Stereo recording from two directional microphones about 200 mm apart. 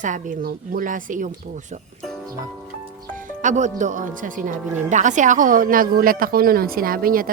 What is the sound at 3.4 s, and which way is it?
Speech, 35° right (ahead or behind).